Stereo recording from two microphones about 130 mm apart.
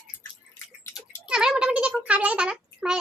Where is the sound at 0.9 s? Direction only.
5° right (ahead or behind).